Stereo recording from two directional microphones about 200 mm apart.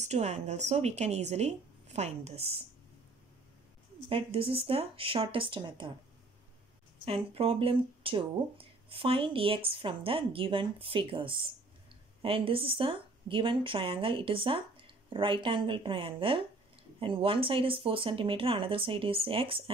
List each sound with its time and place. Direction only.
0.0 s a woman's voice: 35° right (ahead or behind)
4.1 s speech: 30° right (ahead or behind)
7.1 s speech: 30° right (ahead or behind)